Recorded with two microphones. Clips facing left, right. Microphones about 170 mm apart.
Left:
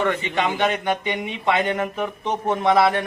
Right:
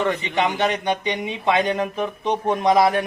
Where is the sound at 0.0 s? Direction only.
15° right (ahead or behind).